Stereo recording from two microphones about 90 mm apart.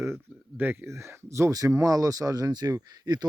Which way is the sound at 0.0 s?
25° right (ahead or behind).